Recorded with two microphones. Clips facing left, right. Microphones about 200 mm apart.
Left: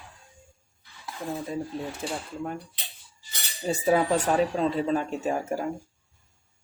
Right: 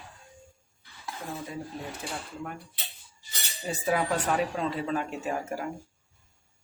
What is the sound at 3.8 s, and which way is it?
Speech, 30° left (ahead or behind).